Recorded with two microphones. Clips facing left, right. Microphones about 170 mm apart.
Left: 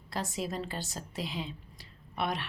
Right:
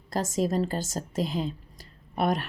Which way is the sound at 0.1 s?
45° right (ahead or behind).